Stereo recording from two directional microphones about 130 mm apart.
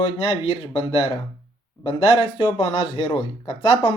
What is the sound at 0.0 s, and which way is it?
Speech, 45° left (ahead or behind).